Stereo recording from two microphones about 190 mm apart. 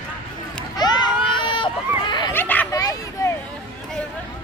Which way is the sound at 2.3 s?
10° left (ahead or behind).